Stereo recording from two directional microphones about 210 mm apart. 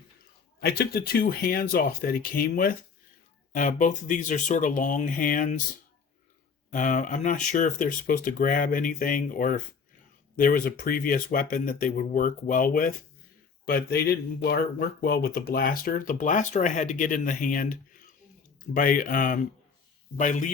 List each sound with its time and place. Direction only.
0.6 s speech: 50° left (ahead or behind)
6.7 s speech: 35° left (ahead or behind)